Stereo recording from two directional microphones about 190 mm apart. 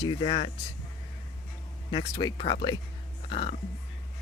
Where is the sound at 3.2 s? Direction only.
25° left (ahead or behind).